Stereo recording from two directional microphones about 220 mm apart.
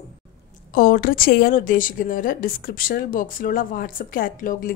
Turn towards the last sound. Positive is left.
turn(degrees=40)  # may be behind; listen again after turning